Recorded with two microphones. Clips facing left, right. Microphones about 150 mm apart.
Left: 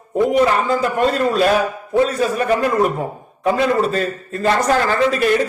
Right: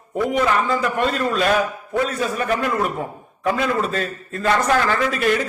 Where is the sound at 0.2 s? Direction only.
35° left (ahead or behind).